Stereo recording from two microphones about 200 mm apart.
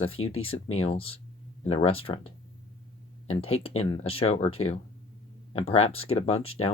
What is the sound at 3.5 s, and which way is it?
Speech, 30° left (ahead or behind).